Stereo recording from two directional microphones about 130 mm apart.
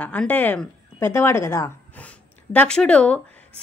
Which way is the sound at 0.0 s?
10° left (ahead or behind).